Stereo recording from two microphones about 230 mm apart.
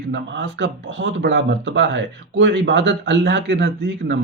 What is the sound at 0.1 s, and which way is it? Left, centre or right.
Speech, right.